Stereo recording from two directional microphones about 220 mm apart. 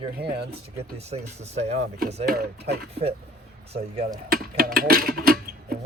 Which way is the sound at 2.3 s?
45° right (ahead or behind).